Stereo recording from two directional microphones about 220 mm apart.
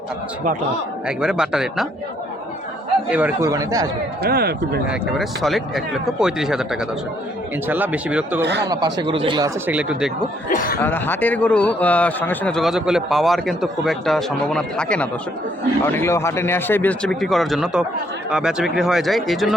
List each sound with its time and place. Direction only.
1.0 s a man's voice: 5° right (ahead or behind)
3.1 s speech: 5° right (ahead or behind)
4.2 s a man's voice: 45° right (ahead or behind)
4.9 s a man's voice: centre (ahead or behind)
8.4 s a man's voice: 50° right (ahead or behind)
8.7 s speech: 20° right (ahead or behind)
9.6 s a man's voice: 5° right (ahead or behind)
10.5 s speech: 40° left (ahead or behind)
10.8 s a man's voice: 10° left (ahead or behind)